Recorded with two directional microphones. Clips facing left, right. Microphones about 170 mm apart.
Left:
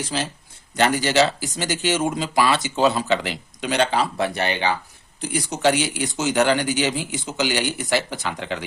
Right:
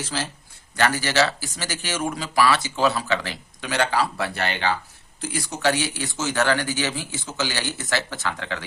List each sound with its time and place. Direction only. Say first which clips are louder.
0.0 s speech: left 3 dB; 20° left (ahead or behind)